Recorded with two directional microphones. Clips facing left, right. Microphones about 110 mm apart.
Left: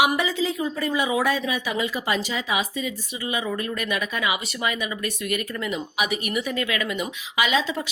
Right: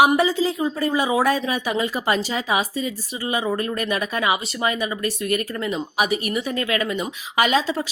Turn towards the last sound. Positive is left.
turn(degrees=-40)  # may be behind; listen again after turning